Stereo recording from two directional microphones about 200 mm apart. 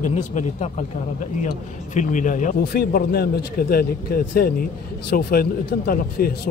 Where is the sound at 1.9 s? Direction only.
40° left (ahead or behind).